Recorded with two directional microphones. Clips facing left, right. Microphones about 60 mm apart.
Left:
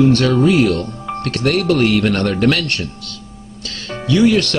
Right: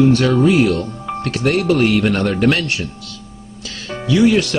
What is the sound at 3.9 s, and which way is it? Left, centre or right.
Music, centre.